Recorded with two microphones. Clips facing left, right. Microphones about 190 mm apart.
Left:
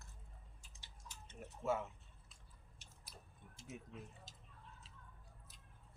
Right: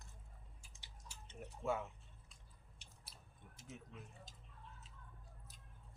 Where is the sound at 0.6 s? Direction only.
15° right (ahead or behind).